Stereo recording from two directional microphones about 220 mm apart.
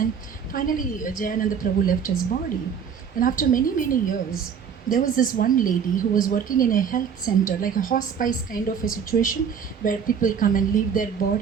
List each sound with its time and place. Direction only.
0.5 s a woman's voice: 40° left (ahead or behind)
3.2 s a woman's voice: 40° left (ahead or behind)